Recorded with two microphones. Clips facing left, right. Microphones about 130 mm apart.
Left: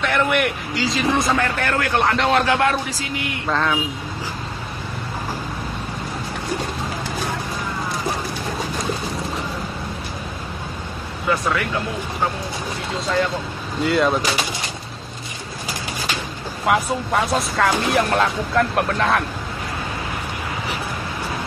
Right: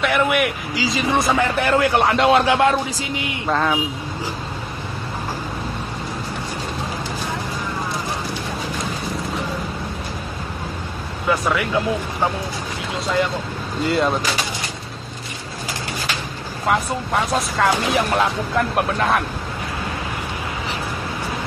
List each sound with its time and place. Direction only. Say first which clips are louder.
0.0 s speech: right 1 dB; 5° right (ahead or behind)
1.1 s a man's voice: right 2 dB; 20° right (ahead or behind)
11.2 s speech: right 1 dB; 5° right (ahead or behind)
13.8 s speech: left 1 dB; centre (ahead or behind)
16.6 s speech: left 1 dB; 5° left (ahead or behind)